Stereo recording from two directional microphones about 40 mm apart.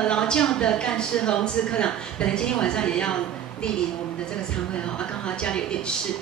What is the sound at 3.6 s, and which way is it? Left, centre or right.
Speech, left.